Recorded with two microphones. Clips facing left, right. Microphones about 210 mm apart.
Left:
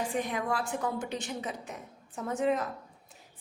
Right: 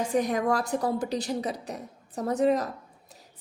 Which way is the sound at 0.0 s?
40° right (ahead or behind).